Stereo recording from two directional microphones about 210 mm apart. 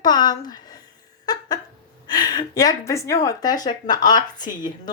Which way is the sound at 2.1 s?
20° left (ahead or behind).